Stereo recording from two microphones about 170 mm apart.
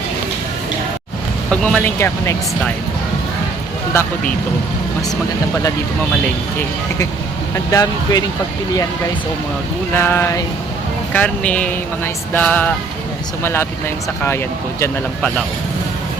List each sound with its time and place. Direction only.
1.5 s speech: 5° left (ahead or behind)
7.5 s speech: 20° left (ahead or behind)
9.9 s speech: 15° left (ahead or behind)